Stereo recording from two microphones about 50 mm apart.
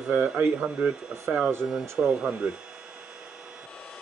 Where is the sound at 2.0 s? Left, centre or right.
Centre.